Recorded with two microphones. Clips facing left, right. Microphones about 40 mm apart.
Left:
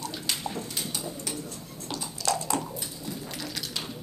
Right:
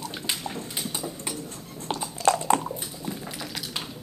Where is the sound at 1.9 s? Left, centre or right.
Right.